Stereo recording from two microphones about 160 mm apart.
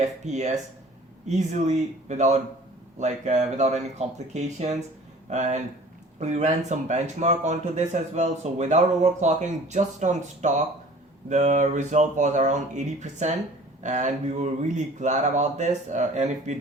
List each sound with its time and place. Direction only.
0.0 s speech: 45° right (ahead or behind)